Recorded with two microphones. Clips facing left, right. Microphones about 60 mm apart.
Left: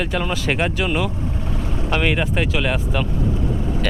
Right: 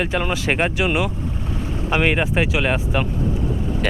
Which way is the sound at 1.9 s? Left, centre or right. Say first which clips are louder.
Right 2 dB; centre.